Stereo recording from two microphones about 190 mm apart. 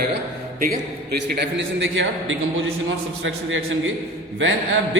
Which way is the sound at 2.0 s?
90° right.